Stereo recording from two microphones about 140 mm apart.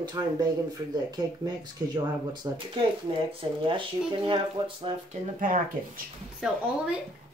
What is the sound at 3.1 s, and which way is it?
Speech, 40° right (ahead or behind).